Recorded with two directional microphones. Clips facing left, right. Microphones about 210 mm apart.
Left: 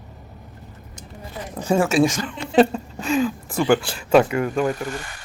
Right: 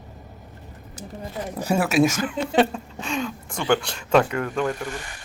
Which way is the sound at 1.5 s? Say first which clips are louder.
Left 2 dB; 5° right (ahead or behind).